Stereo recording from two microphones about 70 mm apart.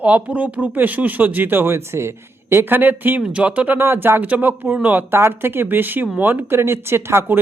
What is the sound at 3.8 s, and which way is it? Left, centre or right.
Speech, right.